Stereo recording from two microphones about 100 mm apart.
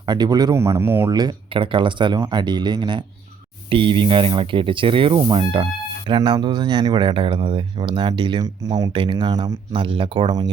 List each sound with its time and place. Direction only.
0.0 s speech: 45° right (ahead or behind)
0.5 s speech: 25° right (ahead or behind)
1.1 s speech: 45° right (ahead or behind)
1.5 s speech: 60° right (ahead or behind)
6.1 s speech: 45° right (ahead or behind)